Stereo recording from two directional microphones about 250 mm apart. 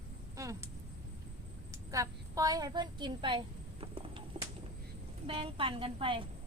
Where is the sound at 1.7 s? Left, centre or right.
Centre.